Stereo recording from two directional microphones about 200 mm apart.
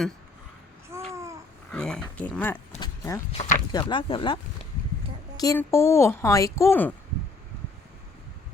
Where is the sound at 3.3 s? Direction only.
30° left (ahead or behind); by 6.9 s 10° left (ahead or behind).